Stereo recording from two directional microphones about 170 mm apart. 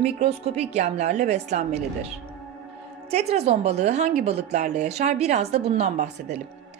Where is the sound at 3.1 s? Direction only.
40° right (ahead or behind).